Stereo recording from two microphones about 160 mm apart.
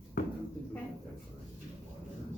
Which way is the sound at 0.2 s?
65° left (ahead or behind).